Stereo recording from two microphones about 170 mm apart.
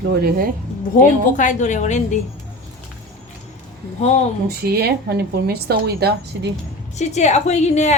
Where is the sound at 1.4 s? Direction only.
45° left (ahead or behind).